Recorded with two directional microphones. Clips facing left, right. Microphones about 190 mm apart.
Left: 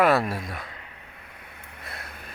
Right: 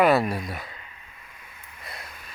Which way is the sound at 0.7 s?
60° left (ahead or behind).